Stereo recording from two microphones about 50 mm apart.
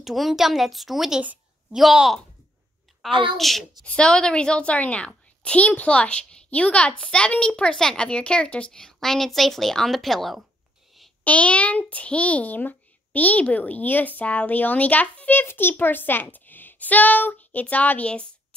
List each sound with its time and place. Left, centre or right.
0.0 s speech: centre
3.8 s a woman's voice: left
8.7 s speech: centre
11.2 s a child's voice: left
15.4 s a child's voice: left